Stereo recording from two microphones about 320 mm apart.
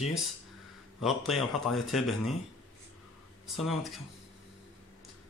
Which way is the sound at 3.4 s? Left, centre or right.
Centre.